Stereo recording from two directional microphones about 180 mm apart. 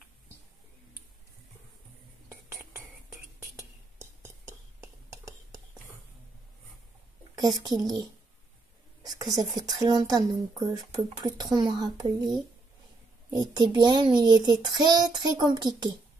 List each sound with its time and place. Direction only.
3.1 s whispering: 15° right (ahead or behind)
7.3 s a child's voice: 20° right (ahead or behind)
9.0 s a child's voice: 20° right (ahead or behind)